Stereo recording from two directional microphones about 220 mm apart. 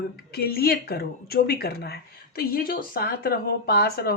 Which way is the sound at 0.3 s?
45° left (ahead or behind).